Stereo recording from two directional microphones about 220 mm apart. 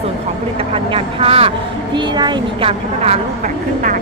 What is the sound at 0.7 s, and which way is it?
A woman's voice, 25° right (ahead or behind).